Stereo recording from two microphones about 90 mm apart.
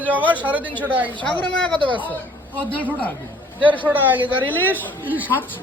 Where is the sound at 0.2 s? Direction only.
20° left (ahead or behind).